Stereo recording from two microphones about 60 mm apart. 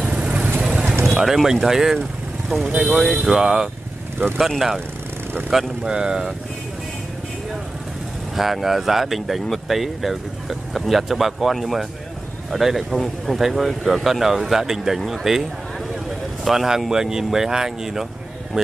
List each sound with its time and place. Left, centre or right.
0.0 s vehicle: right
0.6 s clip-clop: centre
1.1 s speech: centre
3.2 s speech: centre
5.9 s speech: centre
8.4 s speech: centre
16.4 s speech: centre